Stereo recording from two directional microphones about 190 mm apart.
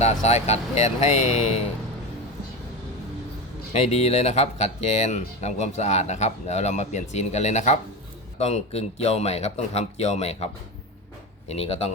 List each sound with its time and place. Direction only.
0.0 s speech: 35° left (ahead or behind)
3.7 s speech: 35° left (ahead or behind)